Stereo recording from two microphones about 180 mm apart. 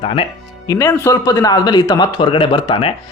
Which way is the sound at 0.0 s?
35° left (ahead or behind).